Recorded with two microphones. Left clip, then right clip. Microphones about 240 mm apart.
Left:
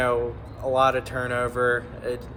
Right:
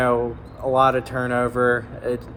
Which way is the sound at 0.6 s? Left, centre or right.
Right.